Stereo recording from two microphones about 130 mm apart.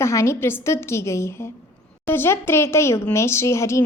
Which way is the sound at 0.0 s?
20° left (ahead or behind).